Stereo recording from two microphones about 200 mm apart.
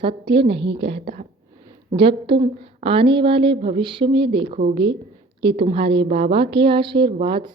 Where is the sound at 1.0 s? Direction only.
40° right (ahead or behind).